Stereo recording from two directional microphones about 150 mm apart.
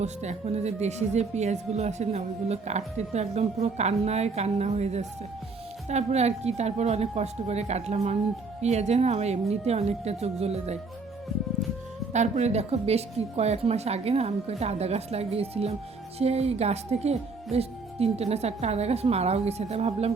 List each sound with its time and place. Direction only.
0.0 s speech: 50° right (ahead or behind)
12.1 s speech: 50° right (ahead or behind)